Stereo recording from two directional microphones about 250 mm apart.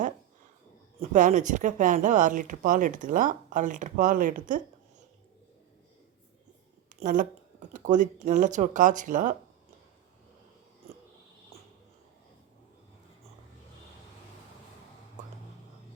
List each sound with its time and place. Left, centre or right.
0.9 s speech: right
7.0 s speech: right